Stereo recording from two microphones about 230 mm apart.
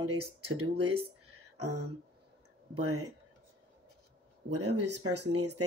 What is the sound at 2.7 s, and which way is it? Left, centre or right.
Speech, right.